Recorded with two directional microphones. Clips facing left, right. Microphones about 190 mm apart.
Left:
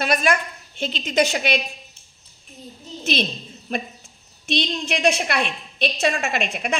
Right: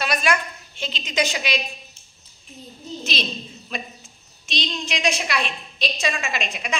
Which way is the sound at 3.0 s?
55° left (ahead or behind).